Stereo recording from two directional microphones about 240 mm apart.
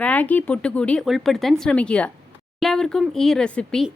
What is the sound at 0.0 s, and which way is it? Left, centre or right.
A woman's voice, centre.